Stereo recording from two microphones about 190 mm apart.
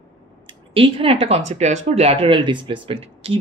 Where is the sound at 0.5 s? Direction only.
25° right (ahead or behind).